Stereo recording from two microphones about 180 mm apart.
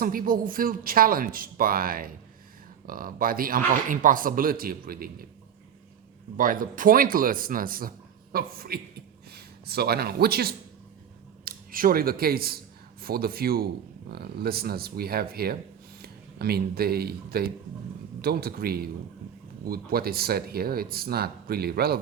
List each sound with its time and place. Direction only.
0.0 s speech: 50° right (ahead or behind)
6.3 s speech: 50° right (ahead or behind)